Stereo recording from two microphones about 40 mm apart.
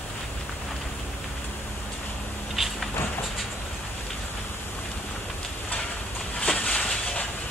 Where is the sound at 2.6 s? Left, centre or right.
Centre.